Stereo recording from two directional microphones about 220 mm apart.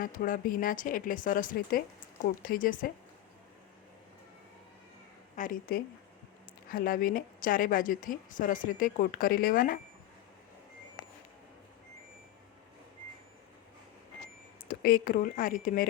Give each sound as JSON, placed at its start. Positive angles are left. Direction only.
{"t": 0.0, "sound": "a woman's voice", "side_deg": 40}
{"t": 5.4, "sound": "a woman's voice", "side_deg": 40}
{"t": 14.7, "sound": "a woman's voice", "side_deg": 40}